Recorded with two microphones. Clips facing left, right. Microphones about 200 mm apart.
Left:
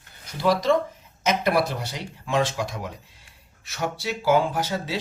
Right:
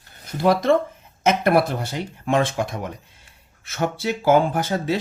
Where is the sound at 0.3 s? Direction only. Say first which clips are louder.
Right 3 dB; 55° right (ahead or behind).